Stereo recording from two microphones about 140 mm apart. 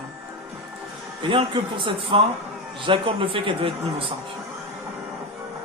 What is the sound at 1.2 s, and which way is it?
Speech, 35° right (ahead or behind).